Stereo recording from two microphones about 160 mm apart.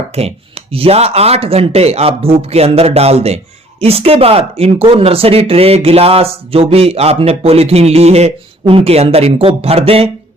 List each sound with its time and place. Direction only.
0.1 s speech: 40° right (ahead or behind)